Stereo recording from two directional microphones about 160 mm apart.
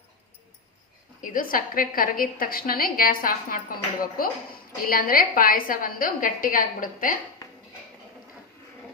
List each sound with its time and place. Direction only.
1.2 s a woman's voice: 60° left (ahead or behind)